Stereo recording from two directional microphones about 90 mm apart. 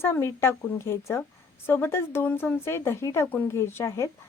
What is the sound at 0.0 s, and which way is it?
A woman's voice, 30° left (ahead or behind).